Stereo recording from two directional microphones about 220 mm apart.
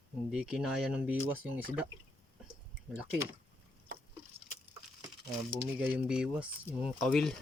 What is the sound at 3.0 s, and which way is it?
Speech, 5° right (ahead or behind).